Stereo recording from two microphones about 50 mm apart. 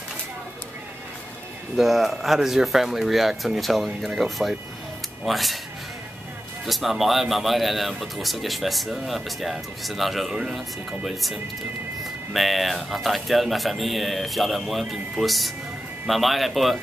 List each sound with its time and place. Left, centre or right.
1.8 s speech: centre
6.6 s speech: centre